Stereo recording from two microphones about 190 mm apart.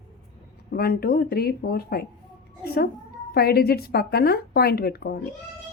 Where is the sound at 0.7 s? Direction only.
55° left (ahead or behind).